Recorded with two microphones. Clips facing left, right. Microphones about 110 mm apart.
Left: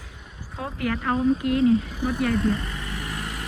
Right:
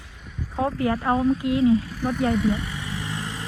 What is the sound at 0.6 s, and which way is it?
Speech, 30° right (ahead or behind).